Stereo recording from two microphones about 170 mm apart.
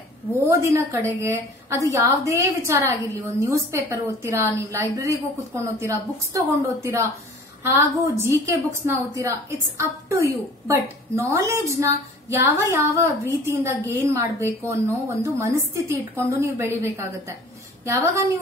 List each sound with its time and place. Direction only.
0.3 s a woman's voice: 15° right (ahead or behind)